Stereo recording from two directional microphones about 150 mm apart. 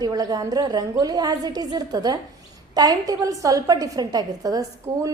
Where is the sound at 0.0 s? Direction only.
25° right (ahead or behind).